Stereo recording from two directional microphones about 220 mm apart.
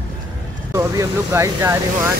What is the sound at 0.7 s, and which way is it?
Speech, 15° right (ahead or behind).